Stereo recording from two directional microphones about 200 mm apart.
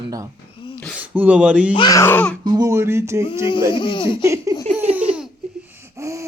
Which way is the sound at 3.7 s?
25° left (ahead or behind).